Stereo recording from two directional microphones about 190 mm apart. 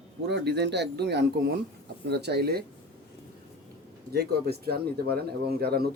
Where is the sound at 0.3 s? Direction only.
60° right (ahead or behind).